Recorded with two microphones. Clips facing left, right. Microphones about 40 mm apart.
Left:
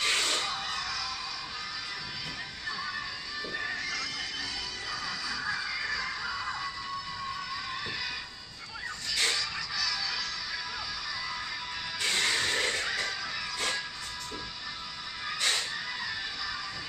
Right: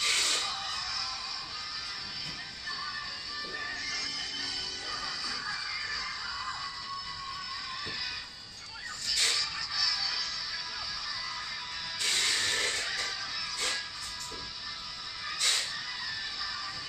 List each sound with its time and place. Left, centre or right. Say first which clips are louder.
0.0 s music: left 2 dB; centre
3.5 s music: left 3 dB; left
9.1 s music: left 1 dB; left
12.0 s music: left 2 dB; left
15.2 s music: left 2 dB; left